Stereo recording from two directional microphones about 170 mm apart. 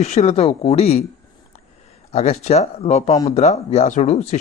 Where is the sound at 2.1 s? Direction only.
40° left (ahead or behind).